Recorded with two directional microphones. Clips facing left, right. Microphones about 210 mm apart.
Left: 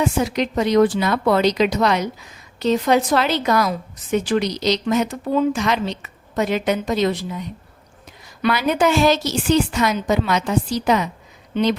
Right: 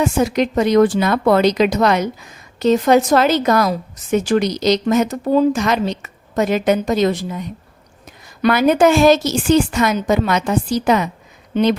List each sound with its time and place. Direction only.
0.0 s a woman's voice: 45° right (ahead or behind)